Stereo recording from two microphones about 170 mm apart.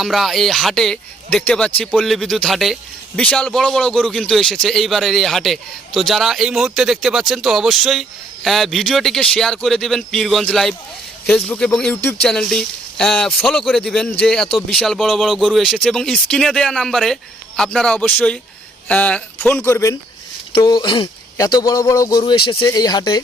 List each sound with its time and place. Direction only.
0.0 s speech: centre (ahead or behind); by 23.2 s 25° left (ahead or behind)